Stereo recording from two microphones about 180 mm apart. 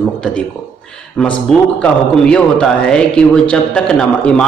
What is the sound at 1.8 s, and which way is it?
A man's voice, 5° left (ahead or behind).